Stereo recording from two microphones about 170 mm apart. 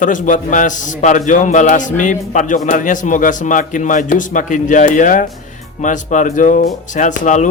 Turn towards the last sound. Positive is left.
turn(degrees=45)  # may be behind; listen again after turning